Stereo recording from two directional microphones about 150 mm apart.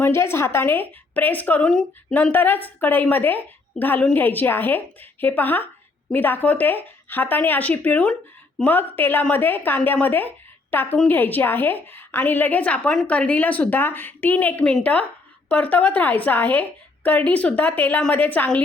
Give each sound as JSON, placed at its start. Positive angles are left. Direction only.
{"t": 0.0, "sound": "a woman's voice", "side_deg": 15}